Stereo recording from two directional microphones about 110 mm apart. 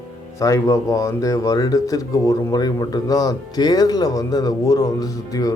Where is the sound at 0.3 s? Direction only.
30° left (ahead or behind).